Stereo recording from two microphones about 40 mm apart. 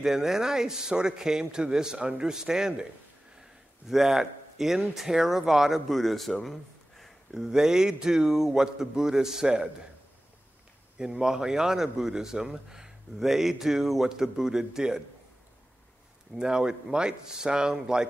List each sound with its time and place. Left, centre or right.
0.0 s a man's voice: centre
5.7 s speech: centre
6.4 s a sound: centre
7.3 s speech: centre
11.0 s speech: centre
16.3 s speech: centre